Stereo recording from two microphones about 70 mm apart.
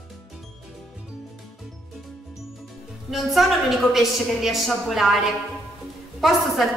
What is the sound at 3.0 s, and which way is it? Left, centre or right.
A woman's voice, centre.